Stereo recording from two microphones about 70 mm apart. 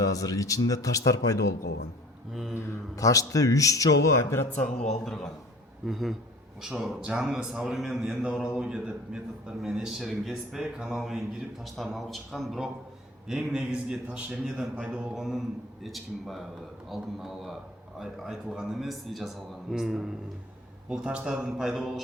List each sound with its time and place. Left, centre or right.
0.1 s speech: left
2.3 s a man's voice: centre
2.6 s a man's voice: left
4.8 s a man's voice: centre
15.1 s a man's voice: centre